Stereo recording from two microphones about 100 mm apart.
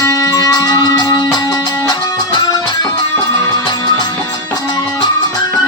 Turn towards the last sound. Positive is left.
turn(degrees=45)  # may be behind; listen again after turning